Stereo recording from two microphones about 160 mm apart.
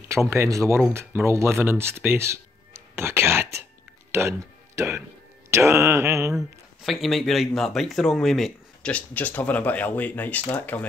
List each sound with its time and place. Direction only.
0.1 s speech: 15° right (ahead or behind)
5.5 s mantra: 15° right (ahead or behind)
6.3 s speech: centre (ahead or behind)